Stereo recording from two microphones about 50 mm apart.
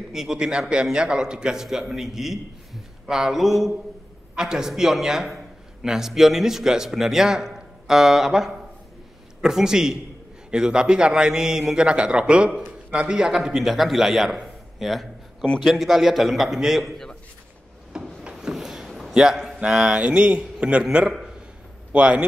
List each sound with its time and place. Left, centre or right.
0.1 s a man's voice: centre
17.9 s rub: centre
18.4 s a sound: centre
19.6 s speech: centre
20.8 s a man's voice: centre
21.1 s a sound: centre
21.9 s a man's voice: right